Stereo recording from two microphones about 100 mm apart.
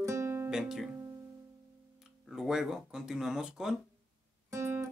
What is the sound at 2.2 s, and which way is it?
Speech, 5° right (ahead or behind).